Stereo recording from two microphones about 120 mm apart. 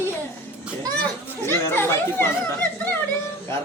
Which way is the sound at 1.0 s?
15° left (ahead or behind).